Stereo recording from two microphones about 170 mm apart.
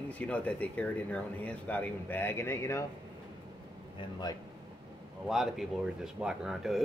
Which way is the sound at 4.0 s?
25° left (ahead or behind).